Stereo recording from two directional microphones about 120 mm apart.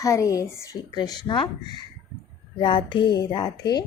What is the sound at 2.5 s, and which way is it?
Speech, 40° left (ahead or behind).